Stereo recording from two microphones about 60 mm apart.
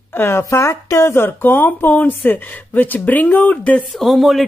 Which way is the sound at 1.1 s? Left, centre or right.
Left.